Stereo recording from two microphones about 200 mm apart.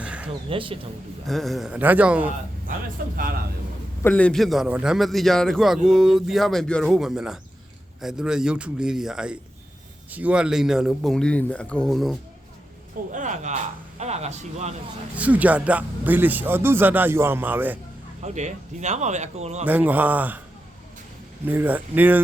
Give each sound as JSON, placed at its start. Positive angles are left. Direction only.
{"t": 0.0, "sound": "a sound", "side_deg": -5}
{"t": 0.5, "sound": "speech", "side_deg": -25}
{"t": 1.3, "sound": "a man's voice", "side_deg": 0}
{"t": 4.0, "sound": "a man's voice", "side_deg": 5}
{"t": 13.1, "sound": "speech", "side_deg": -40}
{"t": 15.1, "sound": "speech", "side_deg": -5}
{"t": 18.2, "sound": "speech", "side_deg": -35}
{"t": 19.6, "sound": "speech", "side_deg": -10}
{"t": 21.4, "sound": "speech", "side_deg": -10}